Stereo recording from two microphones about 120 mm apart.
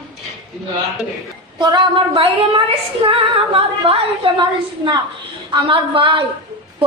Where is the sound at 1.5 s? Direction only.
45° right (ahead or behind).